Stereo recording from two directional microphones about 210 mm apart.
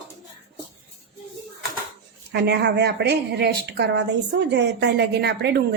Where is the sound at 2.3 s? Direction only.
55° right (ahead or behind).